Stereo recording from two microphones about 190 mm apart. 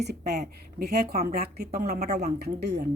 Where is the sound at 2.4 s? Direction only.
60° right (ahead or behind).